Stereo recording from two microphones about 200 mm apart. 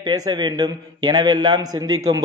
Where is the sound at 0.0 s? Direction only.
20° right (ahead or behind).